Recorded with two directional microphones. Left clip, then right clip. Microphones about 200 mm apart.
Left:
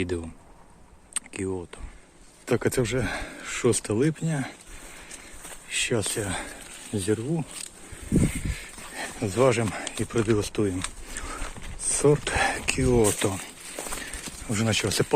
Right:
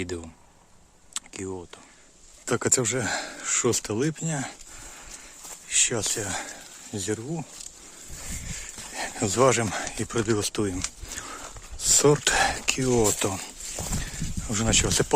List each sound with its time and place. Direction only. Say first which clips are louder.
0.0 s speech: left 3 dB; centre (ahead or behind)
2.5 s speech: even; 15° right (ahead or behind)
5.6 s speech: right 1 dB; 5° right (ahead or behind)
9.0 s speech: right 1 dB; 25° right (ahead or behind)
12.5 s speech: even; 10° right (ahead or behind)
14.0 s a sound: even; 15° right (ahead or behind)